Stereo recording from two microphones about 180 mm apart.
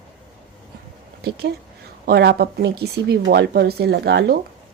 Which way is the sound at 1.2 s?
65° right (ahead or behind).